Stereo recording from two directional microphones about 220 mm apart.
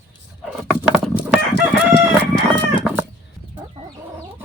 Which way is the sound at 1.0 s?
5° right (ahead or behind).